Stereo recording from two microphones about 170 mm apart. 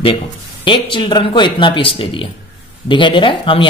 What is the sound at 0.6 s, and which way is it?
A man's voice, 30° left (ahead or behind).